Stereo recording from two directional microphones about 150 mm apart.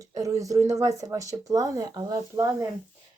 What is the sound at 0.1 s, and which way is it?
Speech, 20° right (ahead or behind).